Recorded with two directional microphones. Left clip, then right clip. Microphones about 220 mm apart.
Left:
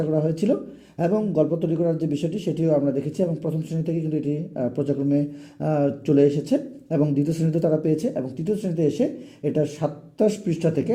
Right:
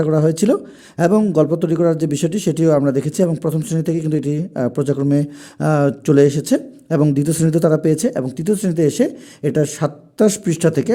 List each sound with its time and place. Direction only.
0.0 s a man's voice: 40° right (ahead or behind)